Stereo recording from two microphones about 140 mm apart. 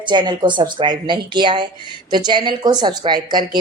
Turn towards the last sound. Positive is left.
turn(degrees=-30)  # may be behind; listen again after turning